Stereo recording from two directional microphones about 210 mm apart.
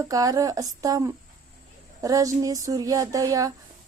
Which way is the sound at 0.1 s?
15° right (ahead or behind).